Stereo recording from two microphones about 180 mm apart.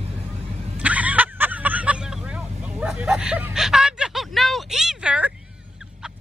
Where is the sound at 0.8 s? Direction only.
10° right (ahead or behind).